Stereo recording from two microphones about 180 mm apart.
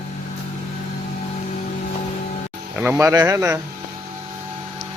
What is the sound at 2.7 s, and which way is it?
Speech, 10° right (ahead or behind).